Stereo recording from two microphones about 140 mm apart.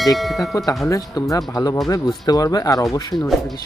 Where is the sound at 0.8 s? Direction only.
25° left (ahead or behind).